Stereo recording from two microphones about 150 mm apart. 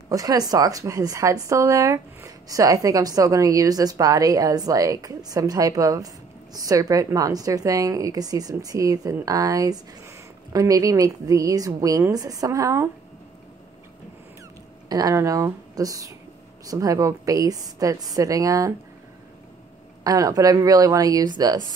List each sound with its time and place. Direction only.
0.1 s a woman's voice: 25° right (ahead or behind)
14.9 s a woman's voice: 25° right (ahead or behind)
20.0 s a woman's voice: 25° right (ahead or behind)